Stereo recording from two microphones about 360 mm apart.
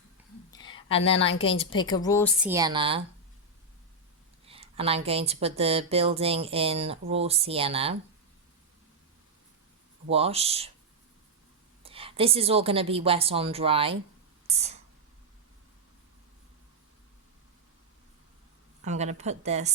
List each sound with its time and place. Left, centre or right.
0.2 s whispering: centre
0.9 s a woman's voice: centre
2.4 s speech: centre
4.4 s speech: centre
10.1 s speech: centre
11.8 s speech: centre
18.9 s speech: centre